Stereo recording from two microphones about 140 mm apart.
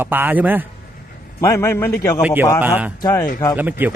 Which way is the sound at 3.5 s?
10° right (ahead or behind).